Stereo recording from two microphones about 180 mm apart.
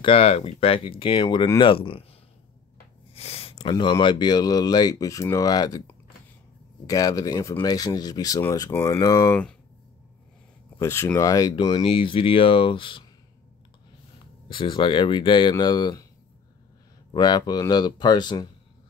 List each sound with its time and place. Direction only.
0.0 s speech: 35° left (ahead or behind)
3.2 s a sound: 35° left (ahead or behind)
3.7 s speech: 25° left (ahead or behind)
6.9 s speech: 20° left (ahead or behind)
10.8 s speech: 15° left (ahead or behind)
14.5 s speech: 25° left (ahead or behind)
17.1 s speech: 25° left (ahead or behind)